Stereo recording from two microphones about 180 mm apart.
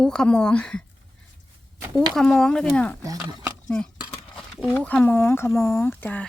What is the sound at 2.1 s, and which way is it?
Speech, 5° left (ahead or behind).